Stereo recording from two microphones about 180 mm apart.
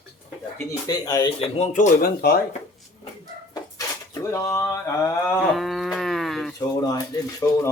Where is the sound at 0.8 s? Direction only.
20° left (ahead or behind); by 1.9 s 45° left (ahead or behind).